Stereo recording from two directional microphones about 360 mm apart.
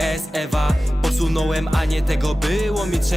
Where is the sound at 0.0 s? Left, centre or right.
Centre.